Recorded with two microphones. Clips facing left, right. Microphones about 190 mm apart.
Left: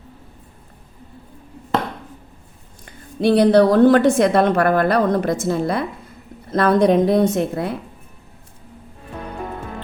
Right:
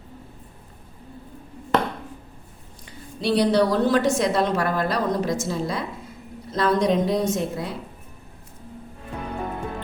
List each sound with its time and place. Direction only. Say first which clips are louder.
2.8 s a woman's voice: left 8 dB; 55° left (ahead or behind)